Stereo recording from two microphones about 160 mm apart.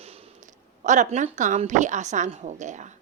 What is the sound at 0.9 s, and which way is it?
Speech, 50° right (ahead or behind).